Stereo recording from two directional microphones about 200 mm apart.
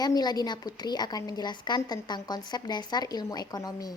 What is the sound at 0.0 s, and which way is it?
A woman's voice, 20° left (ahead or behind).